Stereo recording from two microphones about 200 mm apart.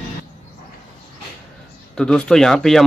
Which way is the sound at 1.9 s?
5° left (ahead or behind).